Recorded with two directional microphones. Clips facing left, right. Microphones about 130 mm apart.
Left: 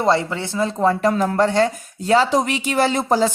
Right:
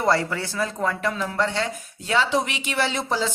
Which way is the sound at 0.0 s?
20° left (ahead or behind).